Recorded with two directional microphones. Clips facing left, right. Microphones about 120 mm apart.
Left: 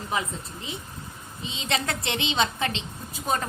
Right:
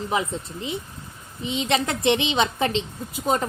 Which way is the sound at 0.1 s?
25° right (ahead or behind).